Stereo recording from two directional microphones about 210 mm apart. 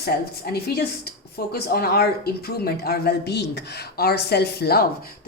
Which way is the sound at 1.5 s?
45° left (ahead or behind).